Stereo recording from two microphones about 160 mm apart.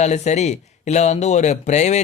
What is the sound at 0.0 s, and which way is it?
Speech, 45° left (ahead or behind).